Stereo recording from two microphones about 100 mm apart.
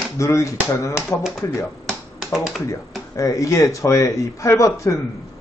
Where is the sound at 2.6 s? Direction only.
30° left (ahead or behind).